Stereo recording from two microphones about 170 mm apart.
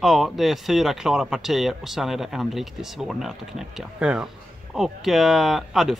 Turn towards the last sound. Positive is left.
turn(degrees=0)  # may be behind; listen again after turning